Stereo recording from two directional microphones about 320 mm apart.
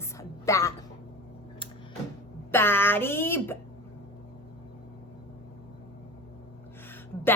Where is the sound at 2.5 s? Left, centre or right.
Centre.